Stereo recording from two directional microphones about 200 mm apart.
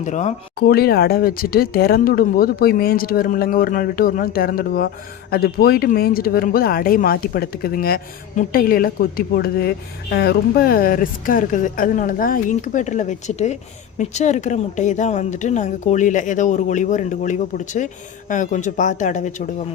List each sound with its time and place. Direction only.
0.0 s speech: 35° left (ahead or behind)
0.6 s speech: 50° left (ahead or behind)